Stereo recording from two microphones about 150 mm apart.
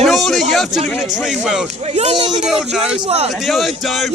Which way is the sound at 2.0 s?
45° right (ahead or behind).